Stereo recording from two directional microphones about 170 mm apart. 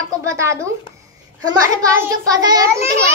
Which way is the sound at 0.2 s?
15° right (ahead or behind).